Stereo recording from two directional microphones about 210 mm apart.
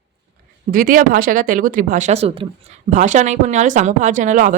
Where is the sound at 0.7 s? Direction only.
40° right (ahead or behind).